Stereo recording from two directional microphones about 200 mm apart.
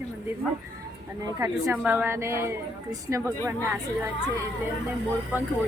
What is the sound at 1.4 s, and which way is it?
Speech, 10° right (ahead or behind).